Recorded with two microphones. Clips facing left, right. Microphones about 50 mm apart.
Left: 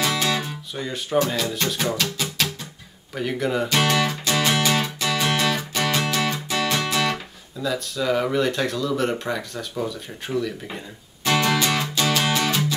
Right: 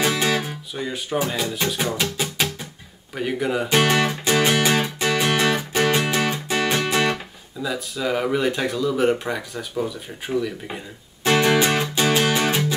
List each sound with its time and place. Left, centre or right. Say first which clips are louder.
0.0 s guitar: right 2 dB; right
0.7 s speech: left 2 dB; centre
1.5 s music: right 1 dB; centre
2.0 s music: right 1 dB; centre
3.2 s speech: right 1 dB; centre
3.6 s music: right 4 dB; right
7.6 s speech: left 1 dB; centre
11.2 s music: right 3 dB; centre